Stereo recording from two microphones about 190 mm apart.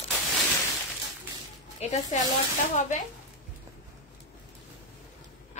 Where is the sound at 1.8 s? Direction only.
40° left (ahead or behind).